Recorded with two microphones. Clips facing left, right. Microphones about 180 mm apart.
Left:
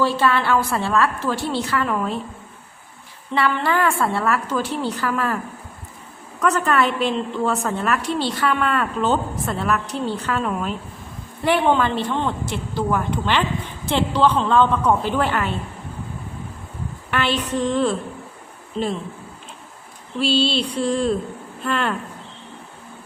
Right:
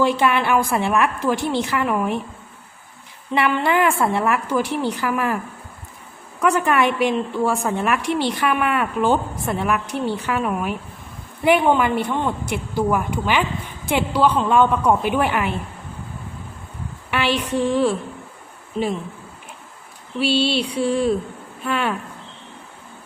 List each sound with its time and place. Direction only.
0.0 s a woman's voice: 15° right (ahead or behind)
3.3 s a woman's voice: 20° right (ahead or behind)
6.4 s a woman's voice: 10° right (ahead or behind)
17.1 s a woman's voice: 10° right (ahead or behind)
20.1 s a woman's voice: 10° right (ahead or behind)